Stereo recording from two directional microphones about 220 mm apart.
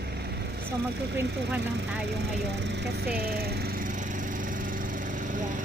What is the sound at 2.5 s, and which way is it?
Lawn mower, 50° right (ahead or behind).